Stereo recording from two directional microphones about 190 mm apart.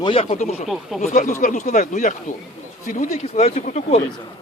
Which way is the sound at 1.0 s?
40° left (ahead or behind).